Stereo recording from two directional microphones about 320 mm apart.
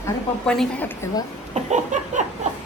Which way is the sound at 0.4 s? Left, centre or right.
Centre.